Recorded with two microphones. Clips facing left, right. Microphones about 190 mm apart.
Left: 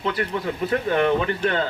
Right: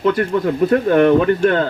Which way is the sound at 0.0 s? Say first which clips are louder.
Right 9 dB; 50° right (ahead or behind).